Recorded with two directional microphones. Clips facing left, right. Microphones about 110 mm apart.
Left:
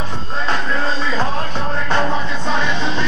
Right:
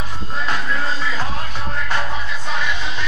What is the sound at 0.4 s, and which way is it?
Music, 30° left (ahead or behind).